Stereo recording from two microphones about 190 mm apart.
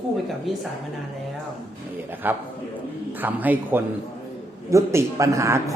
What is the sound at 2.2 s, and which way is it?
A man's voice, 10° right (ahead or behind).